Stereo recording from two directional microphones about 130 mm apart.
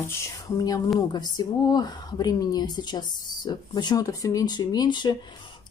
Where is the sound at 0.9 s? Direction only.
30° left (ahead or behind).